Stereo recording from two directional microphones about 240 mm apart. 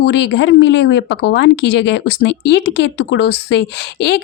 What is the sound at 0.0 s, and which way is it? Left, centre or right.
Speech, left.